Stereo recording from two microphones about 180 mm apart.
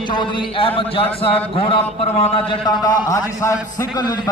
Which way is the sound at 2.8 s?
20° left (ahead or behind).